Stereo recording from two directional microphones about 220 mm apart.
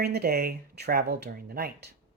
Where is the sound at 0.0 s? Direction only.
45° right (ahead or behind).